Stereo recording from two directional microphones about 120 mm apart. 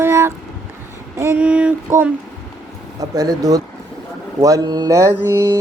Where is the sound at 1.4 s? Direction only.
10° right (ahead or behind).